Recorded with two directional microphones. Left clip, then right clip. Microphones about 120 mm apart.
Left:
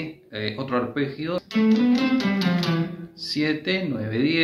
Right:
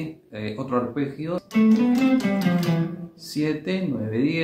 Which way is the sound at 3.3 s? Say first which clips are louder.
Left 2 dB; 30° right (ahead or behind).